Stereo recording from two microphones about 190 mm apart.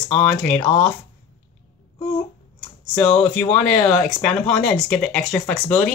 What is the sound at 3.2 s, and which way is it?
Speech, 5° left (ahead or behind).